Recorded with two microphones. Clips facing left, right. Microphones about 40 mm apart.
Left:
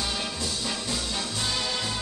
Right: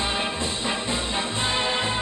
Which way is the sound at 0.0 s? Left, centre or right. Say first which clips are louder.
Right 5 dB; right.